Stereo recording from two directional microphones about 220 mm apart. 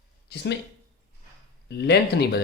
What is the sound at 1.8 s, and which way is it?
Speech, 50° left (ahead or behind).